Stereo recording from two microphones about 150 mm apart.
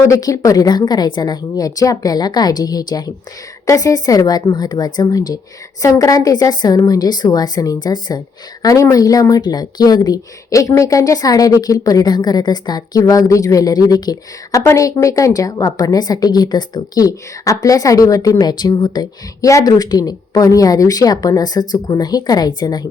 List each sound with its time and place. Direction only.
0.1 s speech: 25° left (ahead or behind)